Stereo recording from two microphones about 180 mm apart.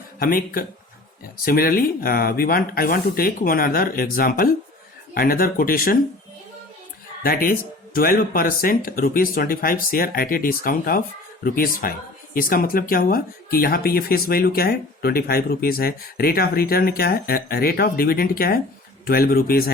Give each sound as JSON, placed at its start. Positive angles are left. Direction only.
{"t": 0.2, "sound": "speech", "side_deg": 50}
{"t": 7.2, "sound": "speech", "side_deg": 50}